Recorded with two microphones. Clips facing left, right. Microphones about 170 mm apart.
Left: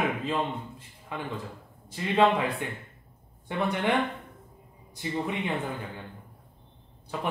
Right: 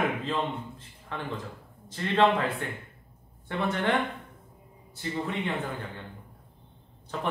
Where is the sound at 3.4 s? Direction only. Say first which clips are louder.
Left 1 dB; 15° left (ahead or behind).